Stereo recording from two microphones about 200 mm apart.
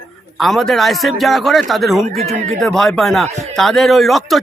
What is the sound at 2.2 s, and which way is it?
Speech, 35° right (ahead or behind).